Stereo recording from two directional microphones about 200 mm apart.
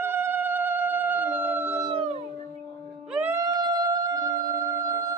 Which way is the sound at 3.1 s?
10° right (ahead or behind).